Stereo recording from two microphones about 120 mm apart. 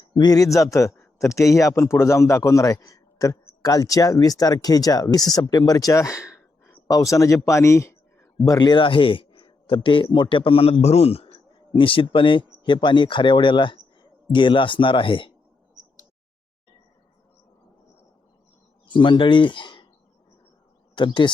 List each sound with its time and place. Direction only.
0.0 s a man's voice: 35° left (ahead or behind)
8.4 s a man's voice: 35° left (ahead or behind)
18.9 s speech: 40° left (ahead or behind)
20.9 s speech: 40° left (ahead or behind)